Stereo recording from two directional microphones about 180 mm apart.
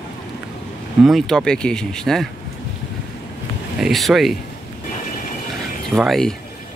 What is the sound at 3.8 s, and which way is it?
Speech, centre (ahead or behind).